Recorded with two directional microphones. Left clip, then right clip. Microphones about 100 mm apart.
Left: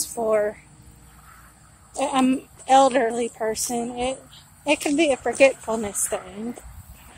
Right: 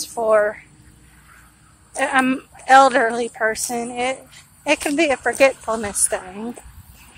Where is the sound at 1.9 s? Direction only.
25° left (ahead or behind).